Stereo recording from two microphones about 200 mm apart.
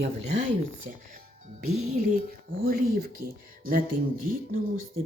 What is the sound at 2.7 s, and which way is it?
Music, 50° right (ahead or behind).